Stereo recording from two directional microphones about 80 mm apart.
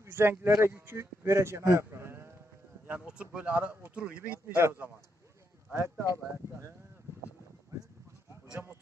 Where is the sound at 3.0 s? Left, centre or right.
Centre.